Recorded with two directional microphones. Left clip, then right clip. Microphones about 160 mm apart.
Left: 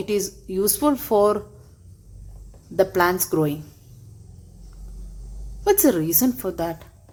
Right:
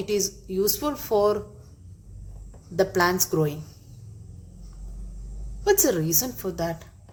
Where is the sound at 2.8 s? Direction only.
40° left (ahead or behind).